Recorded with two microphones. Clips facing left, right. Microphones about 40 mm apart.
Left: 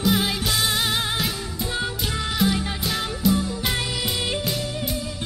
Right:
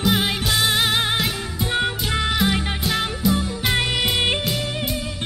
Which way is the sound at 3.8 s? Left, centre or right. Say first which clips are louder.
Right 5 dB; right.